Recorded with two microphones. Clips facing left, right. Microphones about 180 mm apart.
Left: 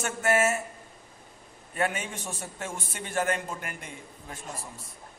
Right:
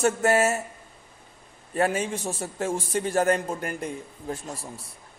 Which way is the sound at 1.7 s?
35° right (ahead or behind).